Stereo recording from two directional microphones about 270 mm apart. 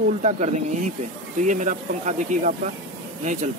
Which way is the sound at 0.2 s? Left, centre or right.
Right.